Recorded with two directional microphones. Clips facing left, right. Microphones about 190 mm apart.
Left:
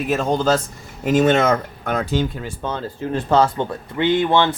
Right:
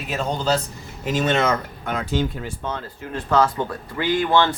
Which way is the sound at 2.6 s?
30° left (ahead or behind).